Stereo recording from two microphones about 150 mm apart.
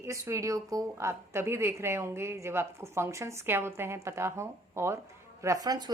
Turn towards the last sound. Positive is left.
turn(degrees=-25)  # may be behind; listen again after turning